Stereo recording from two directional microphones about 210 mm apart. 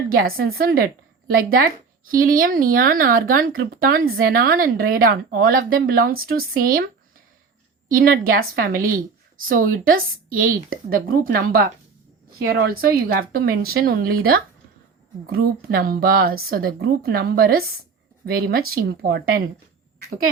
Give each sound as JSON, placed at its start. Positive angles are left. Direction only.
{"t": 0.1, "sound": "speech", "side_deg": -45}
{"t": 7.9, "sound": "a woman's voice", "side_deg": -45}